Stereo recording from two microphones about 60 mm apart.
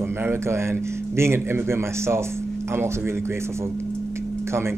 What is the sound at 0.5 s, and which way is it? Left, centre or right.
Speech, right.